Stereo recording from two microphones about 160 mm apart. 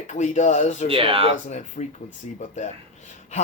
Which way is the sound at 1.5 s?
50° left (ahead or behind).